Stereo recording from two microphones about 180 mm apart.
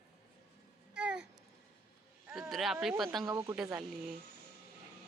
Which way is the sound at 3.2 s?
20° right (ahead or behind).